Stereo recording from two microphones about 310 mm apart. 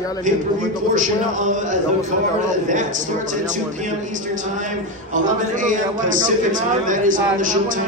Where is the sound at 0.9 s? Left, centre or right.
Right.